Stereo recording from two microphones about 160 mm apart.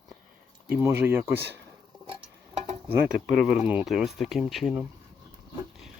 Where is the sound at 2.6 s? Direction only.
40° right (ahead or behind).